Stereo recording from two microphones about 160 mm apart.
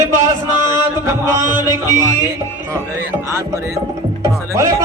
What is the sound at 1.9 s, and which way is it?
Music, 15° right (ahead or behind).